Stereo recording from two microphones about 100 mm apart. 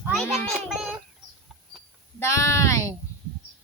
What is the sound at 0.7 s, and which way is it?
Child singing, 5° right (ahead or behind).